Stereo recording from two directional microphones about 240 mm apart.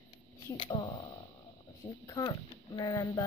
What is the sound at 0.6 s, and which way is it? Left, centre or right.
Speech, left.